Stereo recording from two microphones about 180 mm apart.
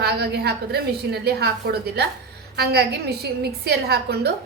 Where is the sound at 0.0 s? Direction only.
65° right (ahead or behind).